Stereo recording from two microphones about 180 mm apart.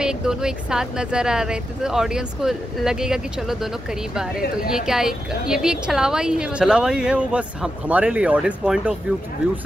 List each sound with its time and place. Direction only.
0.0 s speech: 5° right (ahead or behind)
4.6 s speech: 5° right (ahead or behind)